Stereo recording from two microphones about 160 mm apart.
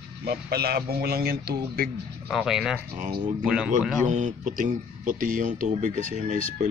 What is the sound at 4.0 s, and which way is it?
Speech, 50° right (ahead or behind).